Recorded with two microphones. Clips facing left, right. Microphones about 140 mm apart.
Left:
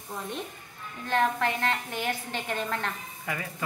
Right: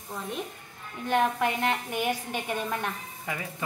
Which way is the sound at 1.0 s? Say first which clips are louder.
Right 1 dB; 15° right (ahead or behind).